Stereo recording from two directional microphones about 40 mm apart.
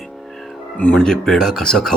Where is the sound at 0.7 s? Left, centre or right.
Left.